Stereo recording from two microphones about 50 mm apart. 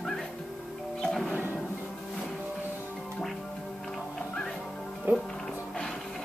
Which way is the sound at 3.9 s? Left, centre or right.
Centre.